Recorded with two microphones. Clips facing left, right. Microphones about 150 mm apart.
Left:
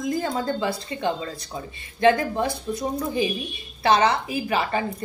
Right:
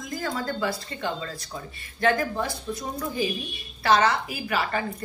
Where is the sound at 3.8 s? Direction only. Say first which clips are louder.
Left 2 dB; 25° left (ahead or behind).